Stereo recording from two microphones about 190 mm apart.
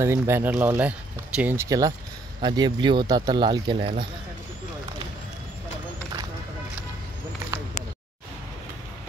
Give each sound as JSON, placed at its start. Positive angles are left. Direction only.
{"t": 0.0, "sound": "speech", "side_deg": -15}